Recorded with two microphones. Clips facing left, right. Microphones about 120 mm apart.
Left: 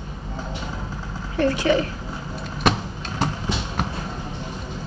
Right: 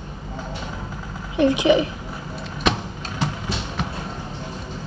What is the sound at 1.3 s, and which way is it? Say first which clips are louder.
Speech: right 3 dB; 15° right (ahead or behind).